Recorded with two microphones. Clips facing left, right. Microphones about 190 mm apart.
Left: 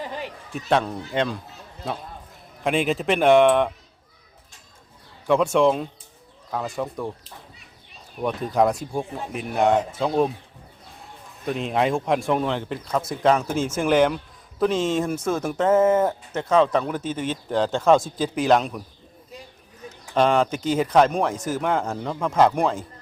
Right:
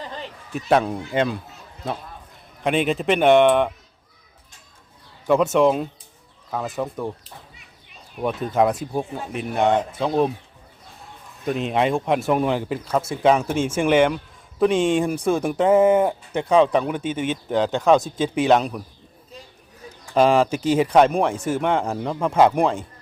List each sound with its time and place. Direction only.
0.0 s a sound: 15° left (ahead or behind)
0.5 s speech: 5° right (ahead or behind)
2.6 s speech: centre (ahead or behind)
5.3 s speech: 5° right (ahead or behind)
8.1 s speech: 5° right (ahead or behind)
11.4 s speech: centre (ahead or behind)
14.6 s speech: 10° right (ahead or behind)
20.1 s speech: 5° right (ahead or behind)